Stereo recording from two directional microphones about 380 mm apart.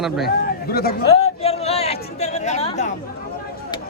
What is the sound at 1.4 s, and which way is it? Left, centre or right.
Chatter, centre.